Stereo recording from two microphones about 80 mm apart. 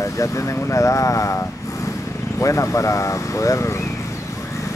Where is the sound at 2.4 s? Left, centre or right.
Left.